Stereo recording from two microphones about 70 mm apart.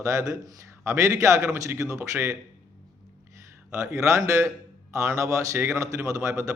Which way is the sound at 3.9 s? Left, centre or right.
Right.